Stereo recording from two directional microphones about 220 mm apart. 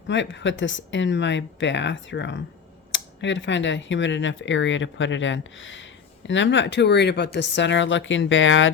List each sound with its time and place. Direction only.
0.1 s speech: 55° left (ahead or behind)